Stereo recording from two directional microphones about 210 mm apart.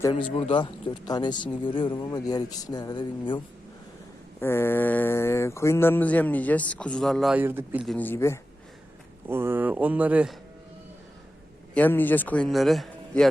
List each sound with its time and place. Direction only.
0.0 s speech: 25° left (ahead or behind)
4.4 s speech: 10° left (ahead or behind); by 7.9 s 5° right (ahead or behind)
7.9 s speech: 10° left (ahead or behind)
9.2 s speech: 10° right (ahead or behind)
11.7 s a man's voice: 10° left (ahead or behind)